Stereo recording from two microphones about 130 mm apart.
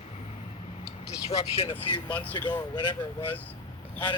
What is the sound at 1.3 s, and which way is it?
Speech, 50° left (ahead or behind).